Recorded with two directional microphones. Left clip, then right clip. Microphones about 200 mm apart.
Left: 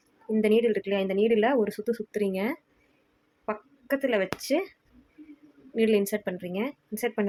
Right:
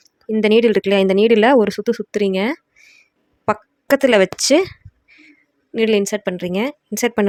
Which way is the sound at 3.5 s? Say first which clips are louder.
Right 13 dB; 55° right (ahead or behind).